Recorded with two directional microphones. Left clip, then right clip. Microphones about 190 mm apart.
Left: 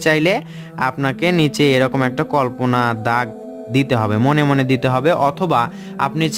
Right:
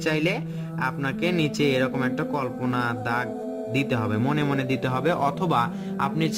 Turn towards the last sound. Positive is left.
turn(degrees=30)  # may be behind; listen again after turning